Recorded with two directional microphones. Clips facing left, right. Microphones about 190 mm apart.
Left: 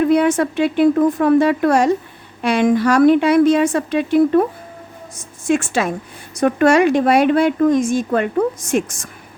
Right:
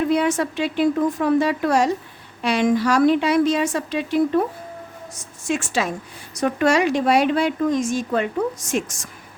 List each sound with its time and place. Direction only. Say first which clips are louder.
0.0 s speech: left 5 dB; 55° left (ahead or behind)